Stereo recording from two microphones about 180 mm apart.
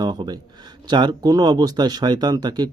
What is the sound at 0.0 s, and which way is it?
Speech, 25° right (ahead or behind).